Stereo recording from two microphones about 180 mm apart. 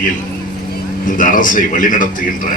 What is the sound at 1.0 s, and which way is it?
A man's voice, 45° left (ahead or behind).